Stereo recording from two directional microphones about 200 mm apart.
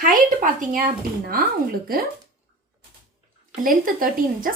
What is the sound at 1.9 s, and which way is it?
Speech, 45° right (ahead or behind).